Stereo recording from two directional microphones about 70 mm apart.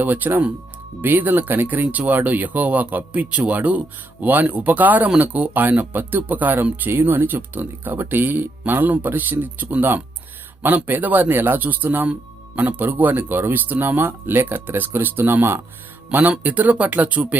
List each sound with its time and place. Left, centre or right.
0.0 s speech: right
16.4 s speech: right